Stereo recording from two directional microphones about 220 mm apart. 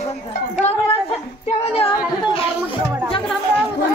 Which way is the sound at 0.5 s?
30° left (ahead or behind).